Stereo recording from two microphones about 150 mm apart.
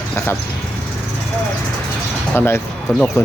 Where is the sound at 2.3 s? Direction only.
15° left (ahead or behind).